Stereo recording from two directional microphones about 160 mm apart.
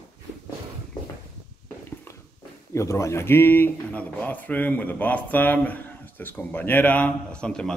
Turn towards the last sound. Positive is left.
turn(degrees=5)  # may be behind; listen again after turning